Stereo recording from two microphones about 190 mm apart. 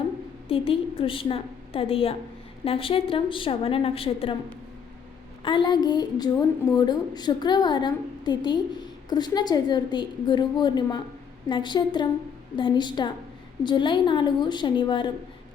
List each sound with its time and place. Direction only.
0.4 s a woman's voice: 30° left (ahead or behind)
5.5 s a woman's voice: 25° left (ahead or behind)